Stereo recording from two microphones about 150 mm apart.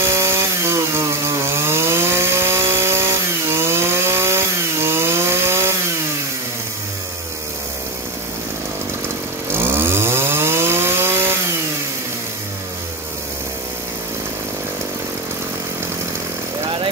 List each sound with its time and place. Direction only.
0.0 s chainsaw: 15° right (ahead or behind)
9.5 s chainsaw: 15° right (ahead or behind)